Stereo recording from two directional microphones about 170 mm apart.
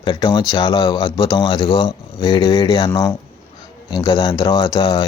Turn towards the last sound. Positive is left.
turn(degrees=25)  # may be behind; listen again after turning